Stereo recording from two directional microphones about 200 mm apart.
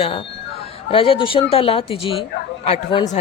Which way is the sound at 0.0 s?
25° left (ahead or behind).